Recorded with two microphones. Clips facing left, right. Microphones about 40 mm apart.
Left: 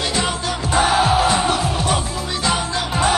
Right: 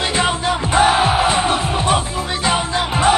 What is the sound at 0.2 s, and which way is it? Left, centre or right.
Music, right.